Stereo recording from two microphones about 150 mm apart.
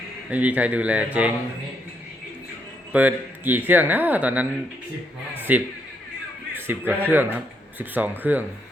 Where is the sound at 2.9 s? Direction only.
10° right (ahead or behind).